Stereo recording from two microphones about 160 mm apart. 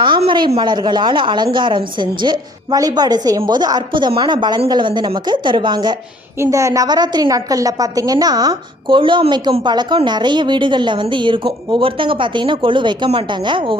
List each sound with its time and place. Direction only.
0.0 s a woman's voice: 30° right (ahead or behind)